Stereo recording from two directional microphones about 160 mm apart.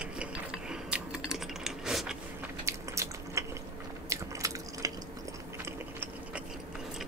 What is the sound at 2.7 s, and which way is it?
Drip, 20° right (ahead or behind).